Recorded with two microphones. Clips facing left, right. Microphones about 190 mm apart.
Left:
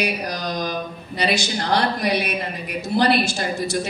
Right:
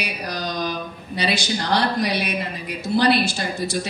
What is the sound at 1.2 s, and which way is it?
Speech, 60° right (ahead or behind).